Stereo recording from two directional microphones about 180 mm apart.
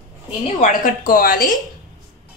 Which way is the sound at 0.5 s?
45° left (ahead or behind).